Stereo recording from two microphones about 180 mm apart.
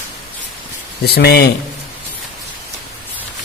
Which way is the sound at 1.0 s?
65° left (ahead or behind).